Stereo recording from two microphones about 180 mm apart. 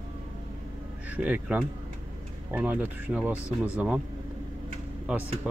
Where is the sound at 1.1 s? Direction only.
10° right (ahead or behind).